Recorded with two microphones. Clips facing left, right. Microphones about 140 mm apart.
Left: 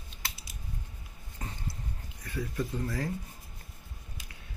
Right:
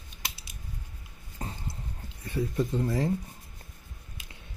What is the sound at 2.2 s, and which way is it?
Speech, 25° right (ahead or behind).